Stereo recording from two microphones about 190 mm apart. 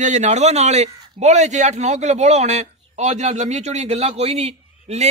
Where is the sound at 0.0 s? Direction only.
40° right (ahead or behind).